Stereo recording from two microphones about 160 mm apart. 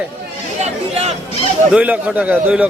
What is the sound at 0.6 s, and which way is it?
Speech, 40° right (ahead or behind).